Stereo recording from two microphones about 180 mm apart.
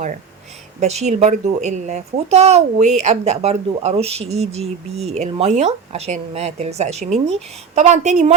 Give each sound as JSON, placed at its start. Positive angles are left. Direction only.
{"t": 0.8, "sound": "speech", "side_deg": -40}